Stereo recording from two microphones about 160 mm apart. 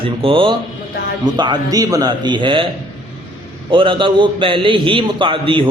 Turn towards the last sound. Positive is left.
turn(degrees=-35)  # may be behind; listen again after turning